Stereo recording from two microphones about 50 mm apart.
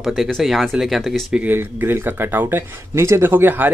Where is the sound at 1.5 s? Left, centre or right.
Right.